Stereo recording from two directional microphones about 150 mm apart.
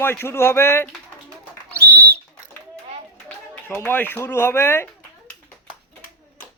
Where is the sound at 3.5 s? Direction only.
15° left (ahead or behind).